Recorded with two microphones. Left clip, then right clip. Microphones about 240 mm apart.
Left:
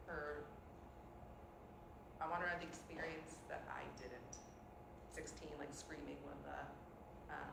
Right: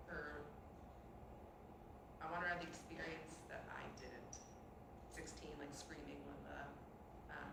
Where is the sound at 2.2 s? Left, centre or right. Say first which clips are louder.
Left 1 dB; centre.